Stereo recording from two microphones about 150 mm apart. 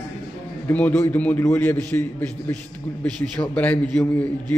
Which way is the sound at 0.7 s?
10° left (ahead or behind).